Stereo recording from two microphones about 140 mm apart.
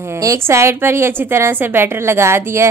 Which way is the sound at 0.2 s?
20° right (ahead or behind).